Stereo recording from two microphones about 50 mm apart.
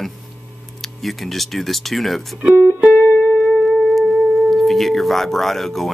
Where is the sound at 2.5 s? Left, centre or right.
Right.